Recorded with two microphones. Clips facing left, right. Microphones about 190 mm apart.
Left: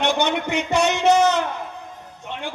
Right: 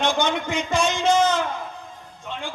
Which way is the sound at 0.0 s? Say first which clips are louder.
Left 2 dB; 65° left (ahead or behind).